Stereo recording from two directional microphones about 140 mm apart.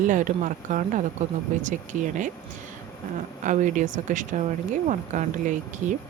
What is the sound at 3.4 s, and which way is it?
Speech, 65° right (ahead or behind).